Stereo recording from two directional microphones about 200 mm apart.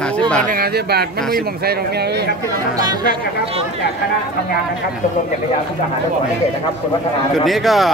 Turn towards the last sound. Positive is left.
turn(degrees=0)  # may be behind; listen again after turning